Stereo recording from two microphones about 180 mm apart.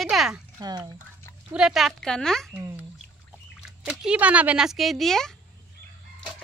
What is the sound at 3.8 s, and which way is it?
Speech, 5° right (ahead or behind).